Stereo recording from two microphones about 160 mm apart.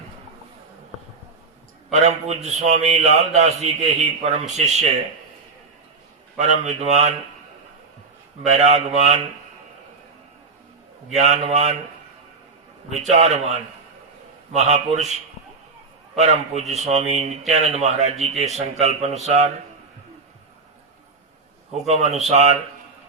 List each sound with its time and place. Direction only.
1.9 s a man's voice: 45° right (ahead or behind)
6.4 s a man's voice: 45° right (ahead or behind)
8.4 s a man's voice: 45° right (ahead or behind)
11.1 s a man's voice: 45° right (ahead or behind)
13.1 s a man's voice: 45° right (ahead or behind)
21.7 s a man's voice: 45° right (ahead or behind)